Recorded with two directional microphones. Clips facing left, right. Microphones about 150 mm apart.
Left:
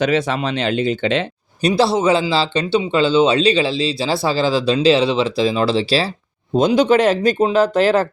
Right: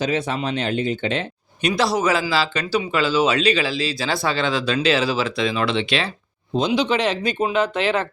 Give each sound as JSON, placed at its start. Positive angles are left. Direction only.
{"t": 0.0, "sound": "speech", "side_deg": 80}
{"t": 1.6, "sound": "speech", "side_deg": 30}
{"t": 6.6, "sound": "speech", "side_deg": 45}